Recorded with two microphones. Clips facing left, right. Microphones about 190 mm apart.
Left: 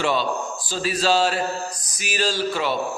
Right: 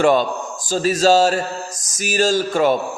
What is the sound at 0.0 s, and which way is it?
A man's voice, 50° right (ahead or behind).